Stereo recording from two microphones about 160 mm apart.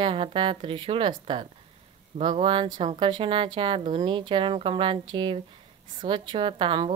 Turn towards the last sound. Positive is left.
turn(degrees=-30)  # may be behind; listen again after turning